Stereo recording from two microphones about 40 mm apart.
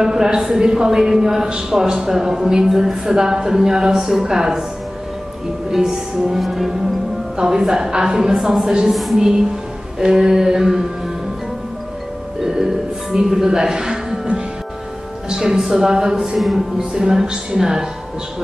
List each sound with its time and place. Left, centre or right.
0.0 s a man's voice: centre
5.7 s a man's voice: centre
7.3 s a man's voice: centre
8.9 s speech: centre
9.9 s a man's voice: centre
12.4 s music: centre
15.2 s a man's voice: centre
16.3 s speech: centre
16.7 s a man's voice: centre